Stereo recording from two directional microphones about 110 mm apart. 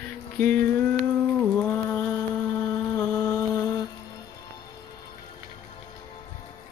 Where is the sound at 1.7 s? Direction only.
20° left (ahead or behind).